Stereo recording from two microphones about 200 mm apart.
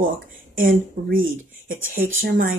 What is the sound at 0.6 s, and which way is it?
Speech, 45° right (ahead or behind).